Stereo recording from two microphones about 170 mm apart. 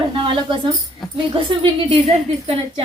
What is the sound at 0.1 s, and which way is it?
Speech, 30° right (ahead or behind).